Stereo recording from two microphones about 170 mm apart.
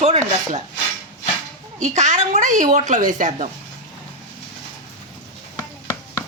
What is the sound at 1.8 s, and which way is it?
Speech, 45° right (ahead or behind).